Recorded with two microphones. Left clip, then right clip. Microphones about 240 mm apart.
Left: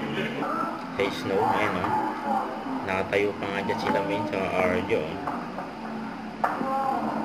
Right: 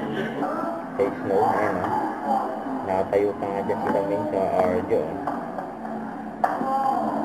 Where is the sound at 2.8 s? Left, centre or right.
Left.